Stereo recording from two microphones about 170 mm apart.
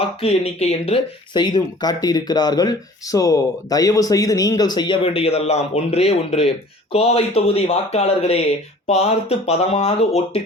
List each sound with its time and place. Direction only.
0.0 s speech: 35° left (ahead or behind)